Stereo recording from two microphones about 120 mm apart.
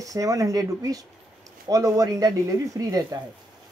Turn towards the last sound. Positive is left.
turn(degrees=-30)  # may be behind; listen again after turning